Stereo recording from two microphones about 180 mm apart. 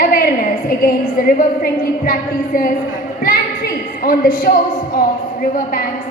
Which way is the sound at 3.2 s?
55° left (ahead or behind).